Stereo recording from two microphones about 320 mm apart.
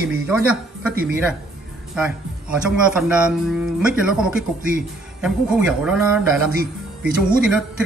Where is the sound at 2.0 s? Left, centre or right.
Centre.